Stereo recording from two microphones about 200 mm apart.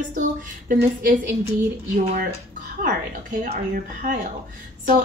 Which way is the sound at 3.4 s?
40° right (ahead or behind).